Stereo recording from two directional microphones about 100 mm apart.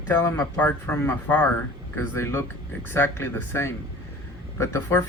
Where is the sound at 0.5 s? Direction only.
20° left (ahead or behind).